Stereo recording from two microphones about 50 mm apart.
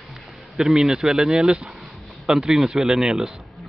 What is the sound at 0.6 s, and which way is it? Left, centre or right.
A man's voice, centre.